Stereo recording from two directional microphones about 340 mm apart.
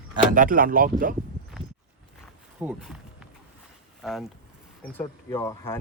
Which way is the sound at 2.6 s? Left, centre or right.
Centre.